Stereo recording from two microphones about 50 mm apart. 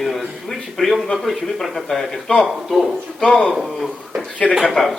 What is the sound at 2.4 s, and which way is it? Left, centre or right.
Speech, centre.